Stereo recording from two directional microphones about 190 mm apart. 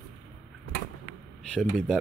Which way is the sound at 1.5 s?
5° left (ahead or behind).